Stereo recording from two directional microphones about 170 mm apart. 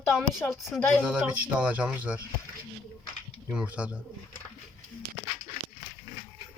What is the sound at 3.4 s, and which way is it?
Speech, 5° right (ahead or behind).